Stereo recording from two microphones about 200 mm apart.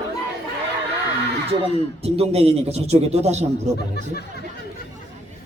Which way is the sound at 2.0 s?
30° right (ahead or behind).